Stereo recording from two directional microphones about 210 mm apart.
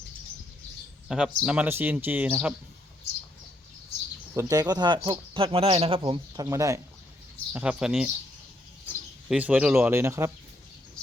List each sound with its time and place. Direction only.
1.0 s speech: 5° right (ahead or behind)
4.4 s speech: 15° right (ahead or behind)
9.3 s speech: 5° right (ahead or behind)